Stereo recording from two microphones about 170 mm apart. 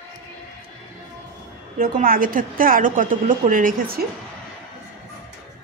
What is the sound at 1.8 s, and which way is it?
A woman's voice, 55° right (ahead or behind).